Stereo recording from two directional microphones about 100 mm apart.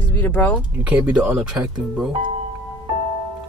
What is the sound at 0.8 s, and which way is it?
Speech, 10° right (ahead or behind).